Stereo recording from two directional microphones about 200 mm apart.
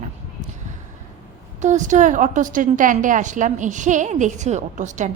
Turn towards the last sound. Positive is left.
turn(degrees=-40)  # may be behind; listen again after turning